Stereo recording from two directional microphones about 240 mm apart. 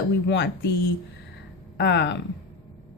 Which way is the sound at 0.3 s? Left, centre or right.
Left.